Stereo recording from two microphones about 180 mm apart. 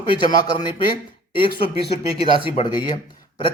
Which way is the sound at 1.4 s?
30° left (ahead or behind).